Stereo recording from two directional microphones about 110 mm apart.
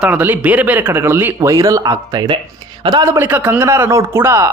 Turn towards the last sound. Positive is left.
turn(degrees=-25)  # may be behind; listen again after turning